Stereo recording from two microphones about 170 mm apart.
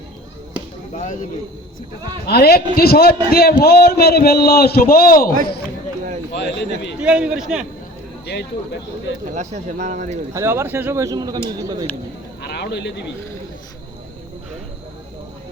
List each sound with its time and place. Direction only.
0.9 s speech: 45° left (ahead or behind)
2.2 s a man's voice: 70° left (ahead or behind)
6.3 s a man's voice: 90° left
7.0 s a man's voice: 5° right (ahead or behind)
9.3 s speech: 45° right (ahead or behind)
10.3 s a man's voice: 15° right (ahead or behind)
12.4 s speech: 80° left